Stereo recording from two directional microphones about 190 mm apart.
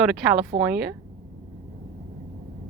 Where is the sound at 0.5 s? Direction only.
30° right (ahead or behind).